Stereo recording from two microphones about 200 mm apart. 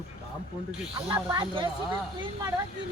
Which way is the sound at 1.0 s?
20° right (ahead or behind).